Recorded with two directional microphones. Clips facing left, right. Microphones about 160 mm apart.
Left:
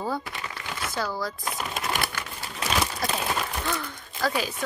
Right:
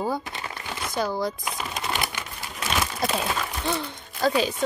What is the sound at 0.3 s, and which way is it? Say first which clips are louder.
Crumpling: right 1 dB; 30° right (ahead or behind).